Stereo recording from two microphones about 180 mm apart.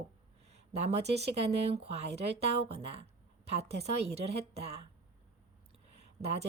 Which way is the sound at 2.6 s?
35° right (ahead or behind).